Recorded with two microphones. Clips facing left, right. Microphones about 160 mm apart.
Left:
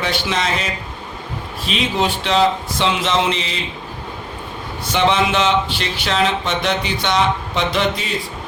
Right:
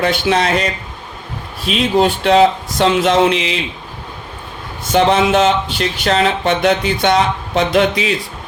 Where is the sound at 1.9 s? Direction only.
50° right (ahead or behind); by 3.6 s 70° right (ahead or behind).